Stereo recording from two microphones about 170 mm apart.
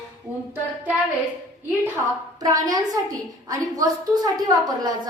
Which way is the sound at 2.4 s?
20° right (ahead or behind).